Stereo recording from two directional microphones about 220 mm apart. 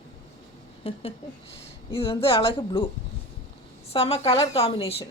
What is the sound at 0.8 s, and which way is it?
Speech, 25° left (ahead or behind).